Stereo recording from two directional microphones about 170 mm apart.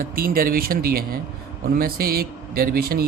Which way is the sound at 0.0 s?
55° right (ahead or behind).